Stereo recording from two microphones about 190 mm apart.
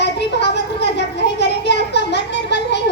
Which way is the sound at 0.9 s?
65° left (ahead or behind).